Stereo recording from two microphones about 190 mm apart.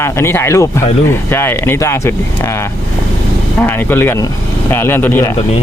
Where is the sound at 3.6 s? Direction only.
10° left (ahead or behind).